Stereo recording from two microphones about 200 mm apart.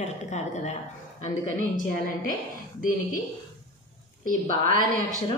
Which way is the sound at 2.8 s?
40° left (ahead or behind).